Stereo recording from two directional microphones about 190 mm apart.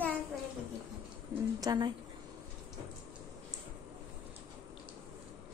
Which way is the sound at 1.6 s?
20° right (ahead or behind).